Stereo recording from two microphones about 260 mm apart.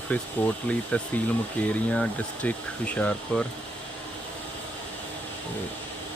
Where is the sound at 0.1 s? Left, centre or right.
Centre.